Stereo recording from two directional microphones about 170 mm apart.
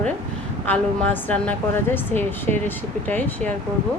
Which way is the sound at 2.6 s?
10° left (ahead or behind).